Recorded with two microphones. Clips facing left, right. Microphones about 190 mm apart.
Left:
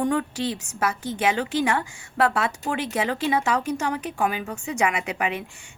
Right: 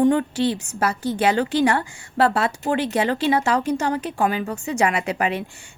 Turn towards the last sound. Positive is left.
turn(degrees=-35)  # may be behind; listen again after turning